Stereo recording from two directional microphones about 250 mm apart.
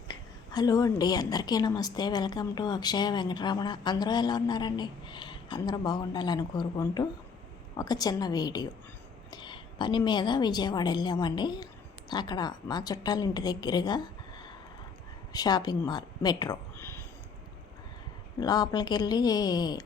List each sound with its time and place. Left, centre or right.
0.1 s a woman's voice: centre
18.3 s a woman's voice: centre